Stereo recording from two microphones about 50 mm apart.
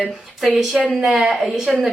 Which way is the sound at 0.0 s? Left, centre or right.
Centre.